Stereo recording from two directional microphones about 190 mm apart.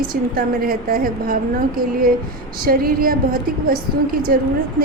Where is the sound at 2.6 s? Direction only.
50° right (ahead or behind).